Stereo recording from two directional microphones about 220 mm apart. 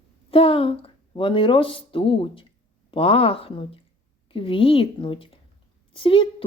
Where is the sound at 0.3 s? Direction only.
25° left (ahead or behind).